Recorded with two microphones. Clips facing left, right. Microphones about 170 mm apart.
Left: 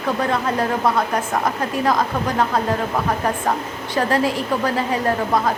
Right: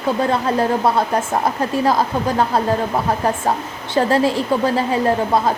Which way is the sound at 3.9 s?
30° right (ahead or behind).